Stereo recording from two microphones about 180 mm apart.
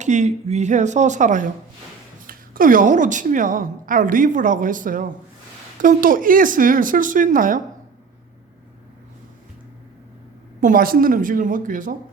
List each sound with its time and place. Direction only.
0.0 s a woman's voice: 40° right (ahead or behind)
10.6 s a woman's voice: 50° right (ahead or behind)